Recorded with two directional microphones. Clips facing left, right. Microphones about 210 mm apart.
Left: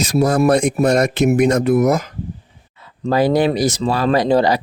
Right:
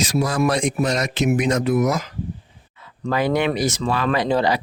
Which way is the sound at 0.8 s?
55° left (ahead or behind).